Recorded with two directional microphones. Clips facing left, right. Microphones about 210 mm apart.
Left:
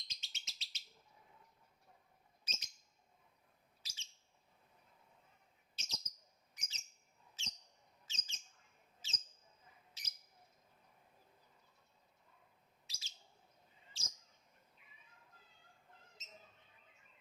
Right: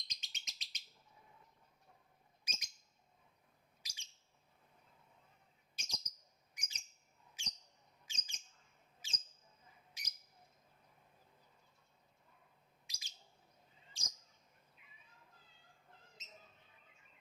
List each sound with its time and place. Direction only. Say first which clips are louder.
0.1 s bird: right 1 dB; 15° right (ahead or behind)
2.4 s bird: even; 10° right (ahead or behind)
3.8 s bird: left 1 dB; 15° right (ahead or behind)
5.7 s bird: even; 15° right (ahead or behind)
6.5 s a sound: right 2 dB; 15° right (ahead or behind)
8.0 s bird: even; 15° right (ahead or behind)
9.0 s a sound: even; 15° right (ahead or behind)
10.0 s bird: right 2 dB; 15° right (ahead or behind)
12.9 s bird: even; 15° right (ahead or behind)